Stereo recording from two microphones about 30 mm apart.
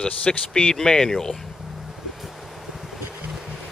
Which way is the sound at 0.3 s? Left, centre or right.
Left.